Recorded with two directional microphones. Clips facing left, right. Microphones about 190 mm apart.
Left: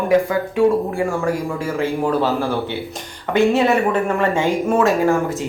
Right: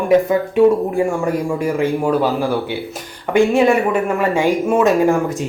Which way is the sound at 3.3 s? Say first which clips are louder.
Right 2 dB; 10° right (ahead or behind).